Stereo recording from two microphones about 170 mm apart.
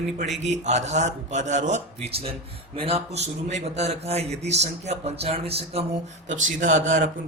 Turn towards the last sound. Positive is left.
turn(degrees=-45)  # may be behind; listen again after turning